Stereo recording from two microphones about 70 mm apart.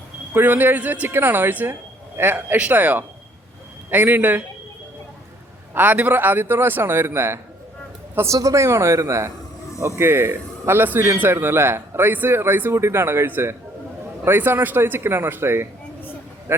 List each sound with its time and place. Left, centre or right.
0.3 s a man's voice: right
5.7 s a man's voice: right
8.4 s a man's voice: right